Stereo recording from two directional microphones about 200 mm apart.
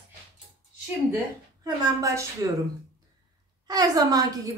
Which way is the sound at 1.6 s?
15° right (ahead or behind).